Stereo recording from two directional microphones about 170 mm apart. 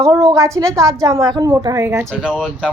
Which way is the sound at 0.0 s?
20° right (ahead or behind).